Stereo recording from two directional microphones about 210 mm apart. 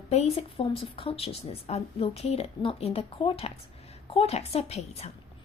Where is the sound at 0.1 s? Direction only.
30° left (ahead or behind).